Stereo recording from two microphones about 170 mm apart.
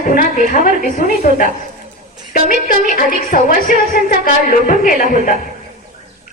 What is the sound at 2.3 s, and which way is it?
A woman's voice, 55° left (ahead or behind).